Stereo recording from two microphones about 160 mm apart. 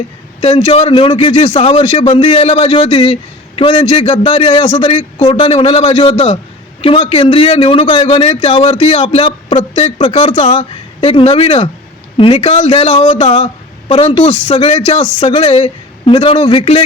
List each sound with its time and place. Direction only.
0.4 s a man's voice: 40° left (ahead or behind)
6.8 s a man's voice: 35° left (ahead or behind)
10.0 s a man's voice: 35° left (ahead or behind)